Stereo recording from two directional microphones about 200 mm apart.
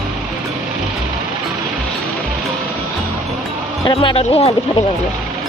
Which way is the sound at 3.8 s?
25° left (ahead or behind).